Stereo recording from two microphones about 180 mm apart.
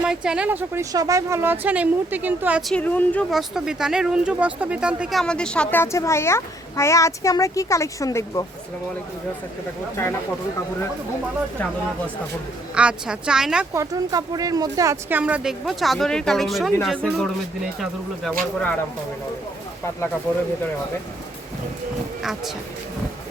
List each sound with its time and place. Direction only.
0.0 s speech: 5° right (ahead or behind)
5.2 s a child's voice: 5° left (ahead or behind)
12.7 s speech: 5° right (ahead or behind)
13.7 s speech: 20° right (ahead or behind)
15.2 s speech: 5° right (ahead or behind)